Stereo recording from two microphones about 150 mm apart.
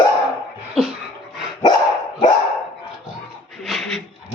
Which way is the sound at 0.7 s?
5° right (ahead or behind).